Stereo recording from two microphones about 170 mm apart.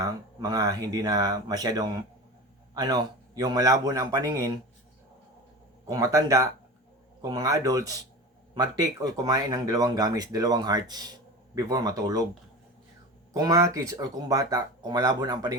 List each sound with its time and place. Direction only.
0.0 s speech: 20° right (ahead or behind)
5.9 s speech: 20° right (ahead or behind)
13.3 s speech: 20° right (ahead or behind)